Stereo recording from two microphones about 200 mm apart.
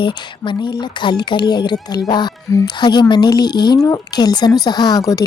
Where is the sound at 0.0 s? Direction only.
25° left (ahead or behind).